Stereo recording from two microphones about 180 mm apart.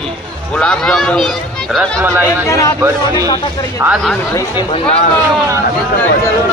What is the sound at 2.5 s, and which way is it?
Speech, 15° left (ahead or behind).